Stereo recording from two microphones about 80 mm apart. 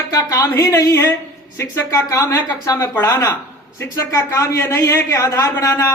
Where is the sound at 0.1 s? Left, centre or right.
Left.